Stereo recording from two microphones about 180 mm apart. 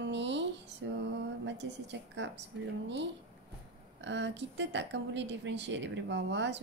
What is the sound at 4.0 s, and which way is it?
A woman's voice, 85° right.